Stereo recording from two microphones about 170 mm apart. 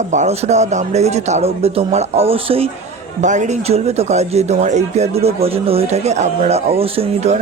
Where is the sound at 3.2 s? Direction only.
45° right (ahead or behind).